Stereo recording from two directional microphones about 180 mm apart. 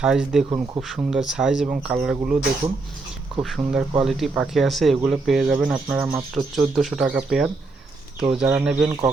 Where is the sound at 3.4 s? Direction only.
Centre (ahead or behind).